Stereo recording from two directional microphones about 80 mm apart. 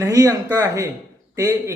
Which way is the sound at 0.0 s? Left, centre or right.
Right.